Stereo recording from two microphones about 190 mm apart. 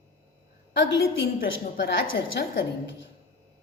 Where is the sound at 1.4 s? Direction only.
60° left (ahead or behind).